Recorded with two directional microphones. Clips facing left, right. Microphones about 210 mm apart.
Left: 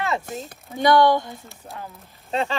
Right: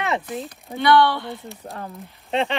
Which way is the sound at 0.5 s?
45° left (ahead or behind).